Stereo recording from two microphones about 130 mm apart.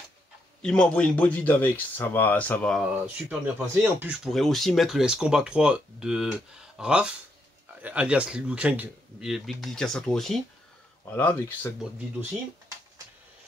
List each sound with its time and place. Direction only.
0.6 s speech: 5° left (ahead or behind)
3.2 s speech: 15° right (ahead or behind)
4.2 s speech: centre (ahead or behind)
9.3 s speech: centre (ahead or behind)